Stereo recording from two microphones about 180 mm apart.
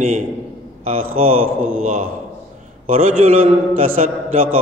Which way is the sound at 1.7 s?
45° right (ahead or behind).